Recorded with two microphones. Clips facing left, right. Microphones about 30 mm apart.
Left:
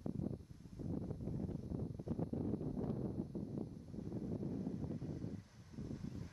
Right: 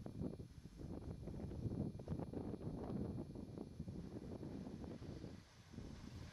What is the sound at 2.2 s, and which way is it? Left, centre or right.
Wind noise, centre.